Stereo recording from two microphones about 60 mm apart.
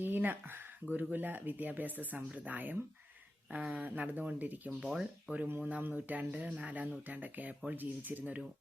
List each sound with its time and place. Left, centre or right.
0.0 s speech: right